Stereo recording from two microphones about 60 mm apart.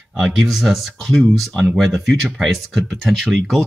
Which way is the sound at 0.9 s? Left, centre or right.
Centre.